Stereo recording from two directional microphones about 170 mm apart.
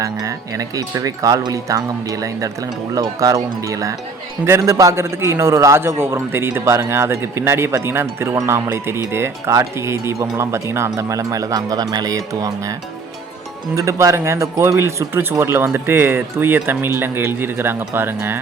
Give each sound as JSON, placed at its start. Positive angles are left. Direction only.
{"t": 0.0, "sound": "a man's voice", "side_deg": -20}
{"t": 13.7, "sound": "a man's voice", "side_deg": -20}